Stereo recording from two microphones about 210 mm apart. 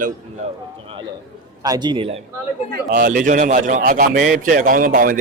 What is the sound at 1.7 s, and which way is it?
Speech, 20° right (ahead or behind).